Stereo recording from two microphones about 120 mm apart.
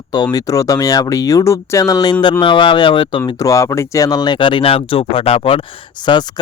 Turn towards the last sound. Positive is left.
turn(degrees=40)  # may be behind; listen again after turning